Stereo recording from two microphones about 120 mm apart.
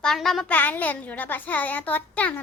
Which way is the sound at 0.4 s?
15° left (ahead or behind).